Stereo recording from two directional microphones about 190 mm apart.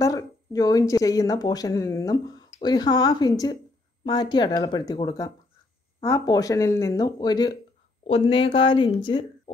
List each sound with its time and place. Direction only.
0.0 s speech: 20° left (ahead or behind)